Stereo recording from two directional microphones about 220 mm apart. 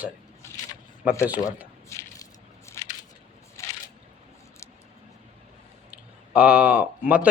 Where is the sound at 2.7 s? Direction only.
10° left (ahead or behind).